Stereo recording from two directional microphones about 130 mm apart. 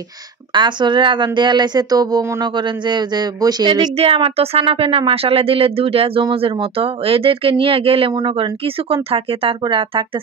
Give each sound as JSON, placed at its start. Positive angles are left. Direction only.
{"t": 0.5, "sound": "speech", "side_deg": -35}
{"t": 3.9, "sound": "a woman's voice", "side_deg": -50}